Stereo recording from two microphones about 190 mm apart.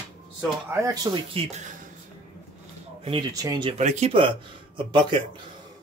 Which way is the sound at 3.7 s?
35° right (ahead or behind).